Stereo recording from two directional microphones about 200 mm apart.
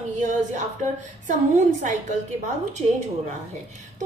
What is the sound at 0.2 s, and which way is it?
Speech, 40° right (ahead or behind).